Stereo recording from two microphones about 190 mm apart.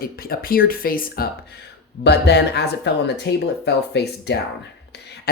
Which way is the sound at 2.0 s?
60° left (ahead or behind).